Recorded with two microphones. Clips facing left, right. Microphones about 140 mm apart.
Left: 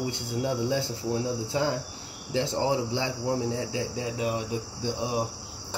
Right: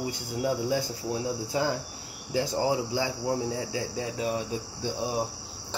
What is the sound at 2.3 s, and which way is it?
Speech, 20° left (ahead or behind).